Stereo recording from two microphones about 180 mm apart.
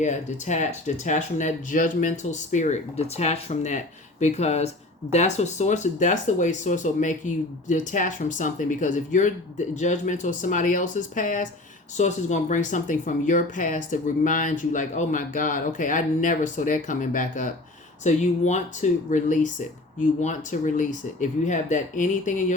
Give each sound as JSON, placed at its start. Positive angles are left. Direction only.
{"t": 0.0, "sound": "speech", "side_deg": 40}